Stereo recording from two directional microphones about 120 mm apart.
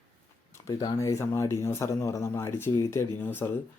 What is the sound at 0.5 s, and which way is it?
Speech, 35° left (ahead or behind).